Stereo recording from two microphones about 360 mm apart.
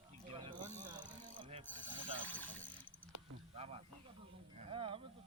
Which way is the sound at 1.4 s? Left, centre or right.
Centre.